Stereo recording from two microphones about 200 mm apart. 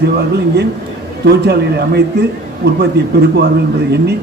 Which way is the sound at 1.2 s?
55° right (ahead or behind).